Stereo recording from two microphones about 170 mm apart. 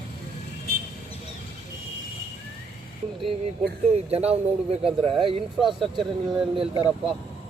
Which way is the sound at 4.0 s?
35° right (ahead or behind).